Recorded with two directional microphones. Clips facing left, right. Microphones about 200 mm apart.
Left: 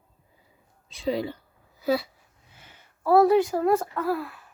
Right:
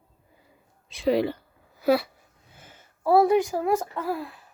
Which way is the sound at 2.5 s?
45° right (ahead or behind).